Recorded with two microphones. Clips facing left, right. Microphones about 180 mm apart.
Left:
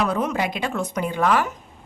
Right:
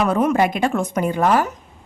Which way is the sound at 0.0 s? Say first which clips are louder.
Right 6 dB; 50° right (ahead or behind).